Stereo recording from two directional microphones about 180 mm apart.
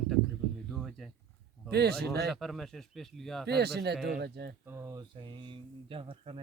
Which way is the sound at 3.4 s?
65° right (ahead or behind).